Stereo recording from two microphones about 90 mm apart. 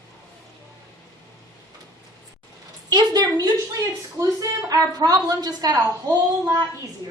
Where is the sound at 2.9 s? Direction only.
50° right (ahead or behind).